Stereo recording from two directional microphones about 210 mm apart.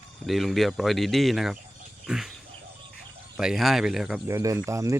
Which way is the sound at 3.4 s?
Centre (ahead or behind).